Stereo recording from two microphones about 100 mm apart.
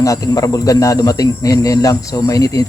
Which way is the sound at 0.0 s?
35° left (ahead or behind).